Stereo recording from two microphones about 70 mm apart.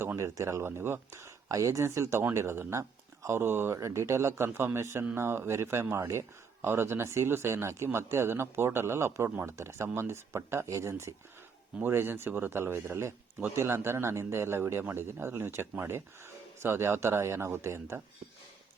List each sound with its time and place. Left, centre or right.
0.2 s speech: right